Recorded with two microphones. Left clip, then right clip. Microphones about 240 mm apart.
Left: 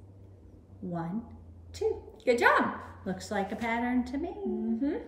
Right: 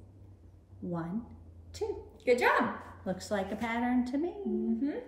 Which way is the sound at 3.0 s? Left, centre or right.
Centre.